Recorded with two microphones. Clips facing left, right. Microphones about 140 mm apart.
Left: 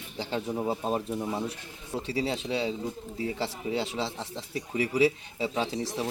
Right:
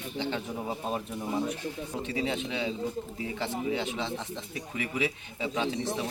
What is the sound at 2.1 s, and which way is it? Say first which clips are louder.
Speech: left 2 dB; 35° left (ahead or behind).